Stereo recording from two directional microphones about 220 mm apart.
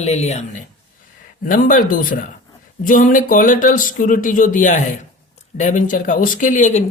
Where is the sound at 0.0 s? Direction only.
30° left (ahead or behind).